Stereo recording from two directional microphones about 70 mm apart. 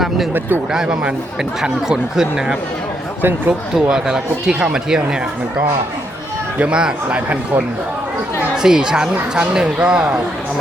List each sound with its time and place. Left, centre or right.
0.7 s speech: centre
3.2 s speech: right
3.8 s speech: centre
6.6 s speech: centre
8.5 s speech: centre